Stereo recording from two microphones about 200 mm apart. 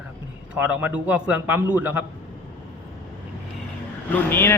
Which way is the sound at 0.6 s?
10° right (ahead or behind).